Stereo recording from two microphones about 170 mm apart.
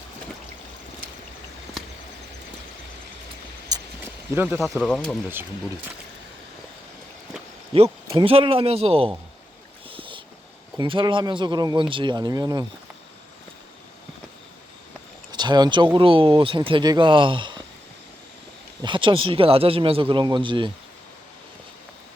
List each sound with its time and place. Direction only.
4.4 s speech: 15° right (ahead or behind)
4.6 s speech: centre (ahead or behind)
7.7 s speech: 35° right (ahead or behind)
9.9 s boat: 30° right (ahead or behind)
10.8 s speech: 25° right (ahead or behind)
15.3 s speech: 25° right (ahead or behind)
18.8 s speech: 30° right (ahead or behind)